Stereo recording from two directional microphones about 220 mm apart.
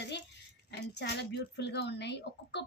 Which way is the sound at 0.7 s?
50° left (ahead or behind).